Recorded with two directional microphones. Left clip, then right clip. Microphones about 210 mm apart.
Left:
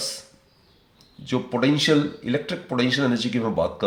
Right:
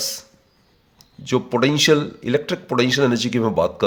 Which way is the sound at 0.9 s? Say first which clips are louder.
Right 6 dB; 50° right (ahead or behind).